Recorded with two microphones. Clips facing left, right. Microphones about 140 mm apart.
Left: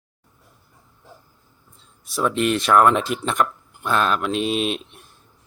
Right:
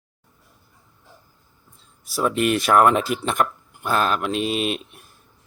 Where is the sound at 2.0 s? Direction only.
5° right (ahead or behind).